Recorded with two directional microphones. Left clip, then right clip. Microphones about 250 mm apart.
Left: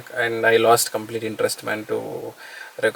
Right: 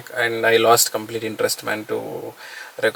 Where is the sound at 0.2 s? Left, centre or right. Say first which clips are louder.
Right 1 dB; centre.